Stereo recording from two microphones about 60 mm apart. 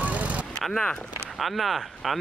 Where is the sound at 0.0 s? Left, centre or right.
Right.